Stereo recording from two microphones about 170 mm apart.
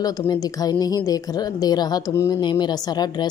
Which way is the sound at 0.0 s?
20° left (ahead or behind).